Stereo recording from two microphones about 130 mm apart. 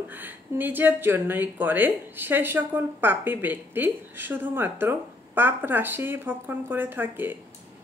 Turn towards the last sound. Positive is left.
turn(degrees=-15)  # may be behind; listen again after turning